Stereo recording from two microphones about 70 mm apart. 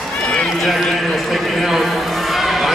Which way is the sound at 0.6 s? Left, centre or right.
Centre.